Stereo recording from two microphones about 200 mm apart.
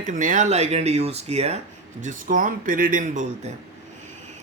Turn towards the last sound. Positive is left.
turn(degrees=-40)  # may be behind; listen again after turning